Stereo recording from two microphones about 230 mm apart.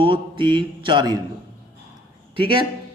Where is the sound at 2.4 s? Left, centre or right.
Right.